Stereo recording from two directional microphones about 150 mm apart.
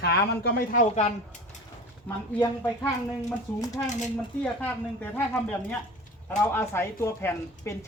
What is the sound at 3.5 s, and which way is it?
A woman's voice, 15° left (ahead or behind).